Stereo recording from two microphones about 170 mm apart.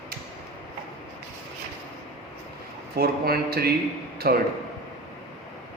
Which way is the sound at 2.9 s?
60° right (ahead or behind).